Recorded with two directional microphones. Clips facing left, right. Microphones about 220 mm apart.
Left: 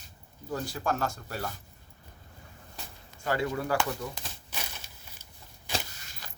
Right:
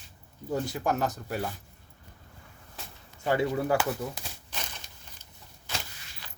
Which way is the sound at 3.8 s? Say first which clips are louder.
Right 2 dB; 10° right (ahead or behind).